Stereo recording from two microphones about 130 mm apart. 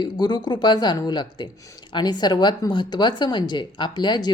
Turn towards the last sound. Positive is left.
turn(degrees=35)  # may be behind; listen again after turning